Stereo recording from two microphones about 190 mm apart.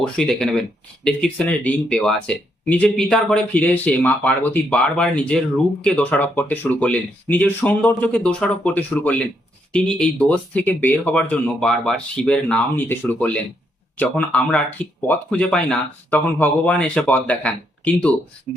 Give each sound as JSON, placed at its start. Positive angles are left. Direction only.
{"t": 0.0, "sound": "speech", "side_deg": 5}